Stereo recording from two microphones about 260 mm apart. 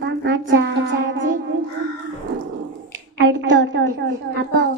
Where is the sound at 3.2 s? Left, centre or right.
Right.